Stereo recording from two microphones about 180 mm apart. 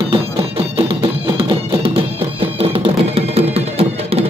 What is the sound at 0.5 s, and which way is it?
Music, 30° right (ahead or behind).